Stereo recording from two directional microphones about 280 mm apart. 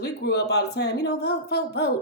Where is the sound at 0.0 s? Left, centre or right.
Left.